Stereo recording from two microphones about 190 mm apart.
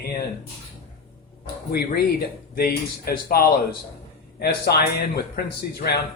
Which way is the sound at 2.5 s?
50° left (ahead or behind).